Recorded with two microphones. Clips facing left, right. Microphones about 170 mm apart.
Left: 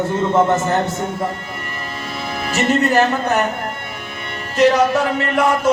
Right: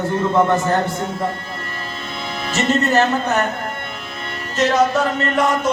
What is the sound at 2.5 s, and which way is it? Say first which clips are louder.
Speech: left 1 dB; 15° left (ahead or behind).